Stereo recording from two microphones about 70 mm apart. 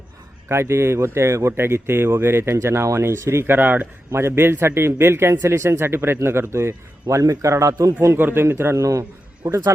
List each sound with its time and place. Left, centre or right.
0.4 s a man's voice: right
8.0 s speech: right